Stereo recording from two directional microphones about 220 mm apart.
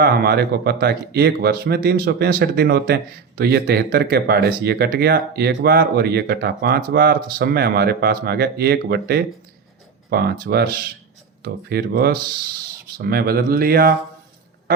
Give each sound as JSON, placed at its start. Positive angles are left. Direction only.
{"t": 0.0, "sound": "speech", "side_deg": -45}